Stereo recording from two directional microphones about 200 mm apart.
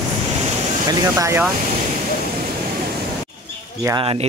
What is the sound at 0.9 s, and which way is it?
Speech, 15° right (ahead or behind).